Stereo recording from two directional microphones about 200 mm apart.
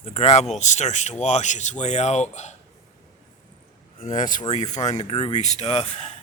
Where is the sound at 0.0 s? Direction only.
30° left (ahead or behind).